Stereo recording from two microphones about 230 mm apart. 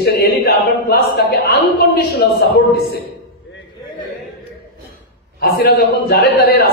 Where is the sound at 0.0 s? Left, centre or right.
Left.